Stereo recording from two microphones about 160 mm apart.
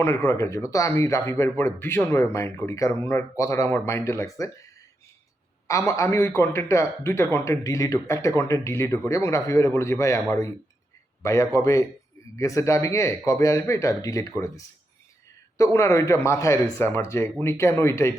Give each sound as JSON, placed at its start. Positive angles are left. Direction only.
{"t": 0.0, "sound": "a man's voice", "side_deg": 20}
{"t": 5.6, "sound": "a man's voice", "side_deg": 20}